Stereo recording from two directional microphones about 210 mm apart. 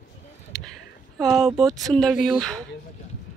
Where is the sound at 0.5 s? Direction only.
Centre (ahead or behind).